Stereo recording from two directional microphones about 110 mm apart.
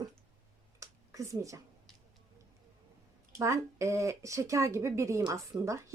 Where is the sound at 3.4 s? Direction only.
30° right (ahead or behind).